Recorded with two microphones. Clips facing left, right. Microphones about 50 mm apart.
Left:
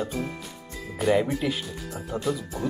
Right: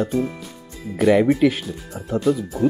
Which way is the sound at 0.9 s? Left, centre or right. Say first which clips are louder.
Right 7 dB; right.